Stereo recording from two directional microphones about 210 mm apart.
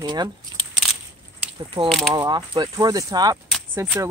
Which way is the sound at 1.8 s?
20° right (ahead or behind).